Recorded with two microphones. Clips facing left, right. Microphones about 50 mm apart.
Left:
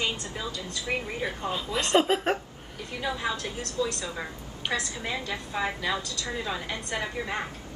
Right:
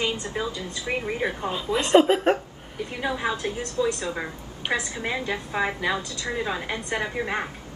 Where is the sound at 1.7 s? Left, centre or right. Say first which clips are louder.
Right 7 dB; centre.